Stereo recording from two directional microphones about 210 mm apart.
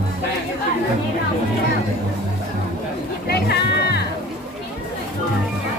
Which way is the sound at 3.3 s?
50° left (ahead or behind).